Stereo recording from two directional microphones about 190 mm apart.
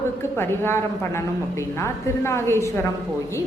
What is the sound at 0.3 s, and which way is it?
A man's voice, 10° left (ahead or behind).